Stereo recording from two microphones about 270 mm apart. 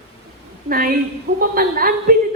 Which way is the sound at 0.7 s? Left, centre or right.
Right.